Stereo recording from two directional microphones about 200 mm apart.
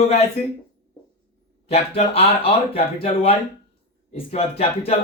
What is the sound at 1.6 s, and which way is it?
A man's voice, 30° left (ahead or behind).